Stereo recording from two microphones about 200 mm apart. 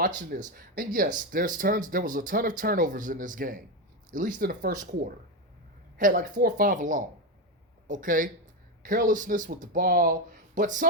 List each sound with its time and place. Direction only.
0.3 s speech: 45° right (ahead or behind)
6.0 s speech: 40° right (ahead or behind)